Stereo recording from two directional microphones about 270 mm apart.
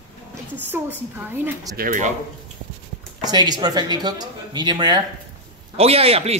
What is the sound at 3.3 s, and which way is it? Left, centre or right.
A man's voice, centre.